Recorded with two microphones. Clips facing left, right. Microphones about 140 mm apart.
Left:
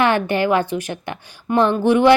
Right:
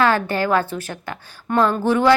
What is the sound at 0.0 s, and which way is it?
A woman's voice, 20° left (ahead or behind).